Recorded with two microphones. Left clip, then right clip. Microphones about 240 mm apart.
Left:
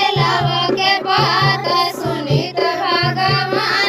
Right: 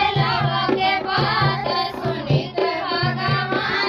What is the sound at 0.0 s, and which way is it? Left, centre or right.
Music, left.